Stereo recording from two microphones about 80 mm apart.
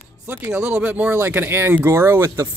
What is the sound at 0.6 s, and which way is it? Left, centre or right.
Speech, centre.